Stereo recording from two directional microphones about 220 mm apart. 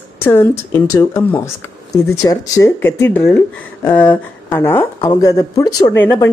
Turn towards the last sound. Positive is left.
turn(degrees=10)  # may be behind; listen again after turning